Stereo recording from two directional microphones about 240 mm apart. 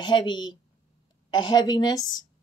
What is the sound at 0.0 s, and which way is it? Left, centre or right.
A woman's voice, centre.